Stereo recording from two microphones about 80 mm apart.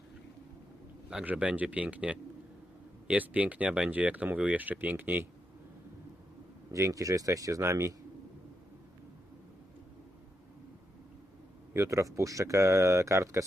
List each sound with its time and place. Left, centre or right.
1.2 s speech: centre
6.7 s speech: right
11.7 s speech: right